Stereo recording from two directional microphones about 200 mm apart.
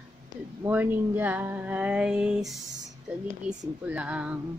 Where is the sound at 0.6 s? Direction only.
10° right (ahead or behind).